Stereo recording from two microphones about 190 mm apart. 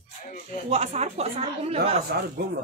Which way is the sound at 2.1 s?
55° right (ahead or behind).